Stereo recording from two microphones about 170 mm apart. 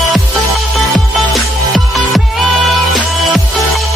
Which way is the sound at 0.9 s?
Centre (ahead or behind).